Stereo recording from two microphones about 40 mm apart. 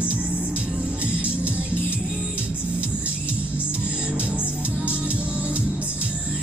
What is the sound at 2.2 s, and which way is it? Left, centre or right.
Music, right.